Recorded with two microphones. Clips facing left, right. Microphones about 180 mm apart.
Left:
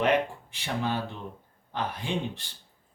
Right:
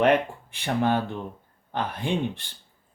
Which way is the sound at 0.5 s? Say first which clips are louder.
Right 7 dB; 55° right (ahead or behind).